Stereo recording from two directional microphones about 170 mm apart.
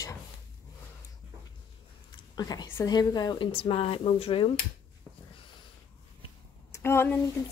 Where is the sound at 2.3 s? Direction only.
25° left (ahead or behind).